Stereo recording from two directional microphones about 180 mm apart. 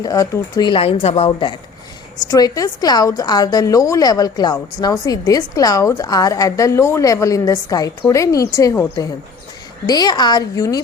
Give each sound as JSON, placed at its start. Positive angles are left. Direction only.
{"t": 0.0, "sound": "a woman's voice", "side_deg": 20}
{"t": 2.2, "sound": "a woman's voice", "side_deg": 20}